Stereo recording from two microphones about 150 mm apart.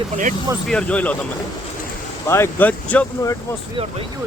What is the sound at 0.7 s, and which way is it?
Speech, 5° left (ahead or behind).